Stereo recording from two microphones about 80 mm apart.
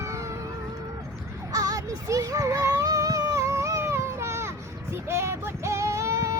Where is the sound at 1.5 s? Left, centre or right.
Right.